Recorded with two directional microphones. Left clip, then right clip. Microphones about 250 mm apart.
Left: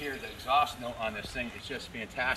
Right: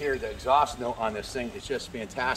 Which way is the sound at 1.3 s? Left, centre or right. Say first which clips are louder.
Right 5 dB; centre.